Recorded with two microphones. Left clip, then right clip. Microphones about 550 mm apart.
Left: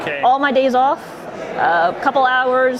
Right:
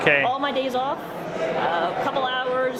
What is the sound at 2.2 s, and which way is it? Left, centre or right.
Speech, left.